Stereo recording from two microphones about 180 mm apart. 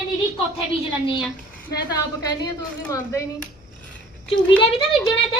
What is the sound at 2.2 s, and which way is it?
Speech, 20° left (ahead or behind).